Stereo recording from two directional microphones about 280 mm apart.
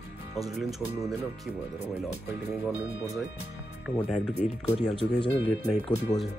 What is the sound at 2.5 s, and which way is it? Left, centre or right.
Speech, centre.